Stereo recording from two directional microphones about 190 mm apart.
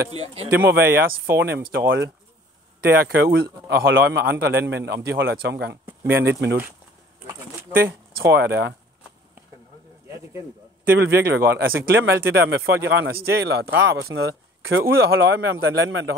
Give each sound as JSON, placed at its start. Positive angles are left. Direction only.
{"t": 0.1, "sound": "a man's voice", "side_deg": -30}
{"t": 0.5, "sound": "a man's voice", "side_deg": -65}
{"t": 8.2, "sound": "a man's voice", "side_deg": -60}
{"t": 10.0, "sound": "a sound", "side_deg": -15}
{"t": 11.0, "sound": "a man's voice", "side_deg": -60}
{"t": 12.4, "sound": "a man's voice", "side_deg": -60}
{"t": 14.7, "sound": "a man's voice", "side_deg": -55}